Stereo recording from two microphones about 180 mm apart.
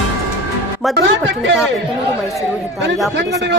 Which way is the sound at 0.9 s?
90° right.